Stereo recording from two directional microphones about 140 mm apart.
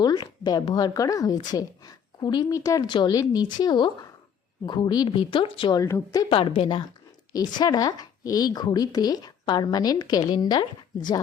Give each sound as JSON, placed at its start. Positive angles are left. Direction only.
{"t": 0.0, "sound": "a woman's voice", "side_deg": 30}
{"t": 5.8, "sound": "a woman's voice", "side_deg": 25}
{"t": 6.2, "sound": "a woman's voice", "side_deg": 40}